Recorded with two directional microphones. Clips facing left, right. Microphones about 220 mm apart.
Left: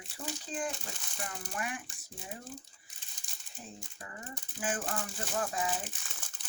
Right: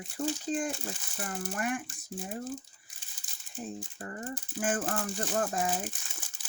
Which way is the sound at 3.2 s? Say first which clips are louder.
Left 1 dB; centre (ahead or behind).